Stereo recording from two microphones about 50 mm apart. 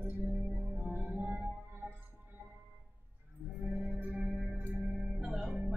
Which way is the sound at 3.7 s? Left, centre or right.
Centre.